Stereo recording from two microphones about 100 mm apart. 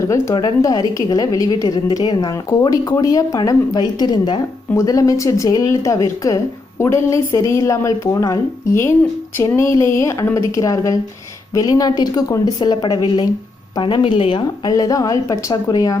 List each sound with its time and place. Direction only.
0.3 s speech: 45° left (ahead or behind)
4.7 s speech: 35° left (ahead or behind)
13.8 s speech: 55° left (ahead or behind)
14.7 s speech: 35° left (ahead or behind)